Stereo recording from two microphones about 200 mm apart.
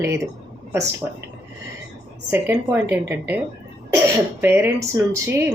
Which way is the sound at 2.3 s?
10° right (ahead or behind).